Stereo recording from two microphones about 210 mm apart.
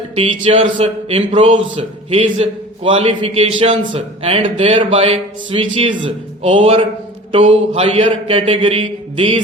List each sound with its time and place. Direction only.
0.2 s speech: 30° right (ahead or behind)